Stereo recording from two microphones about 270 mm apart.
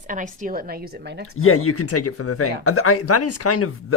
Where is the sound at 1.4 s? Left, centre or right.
Left.